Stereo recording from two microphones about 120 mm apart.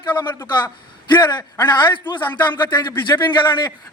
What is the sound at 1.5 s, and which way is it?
Speech, 40° left (ahead or behind).